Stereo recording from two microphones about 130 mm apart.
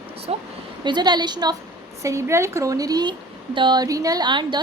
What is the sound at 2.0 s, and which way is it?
A woman's voice, 20° right (ahead or behind).